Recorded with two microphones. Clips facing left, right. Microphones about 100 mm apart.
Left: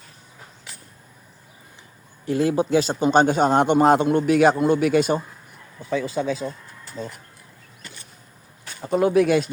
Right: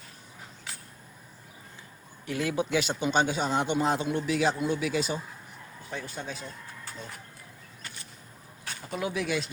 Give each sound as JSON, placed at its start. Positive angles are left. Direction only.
{"t": 2.2, "sound": "a man's voice", "side_deg": 35}
{"t": 5.9, "sound": "speech", "side_deg": 90}
{"t": 8.8, "sound": "a man's voice", "side_deg": 45}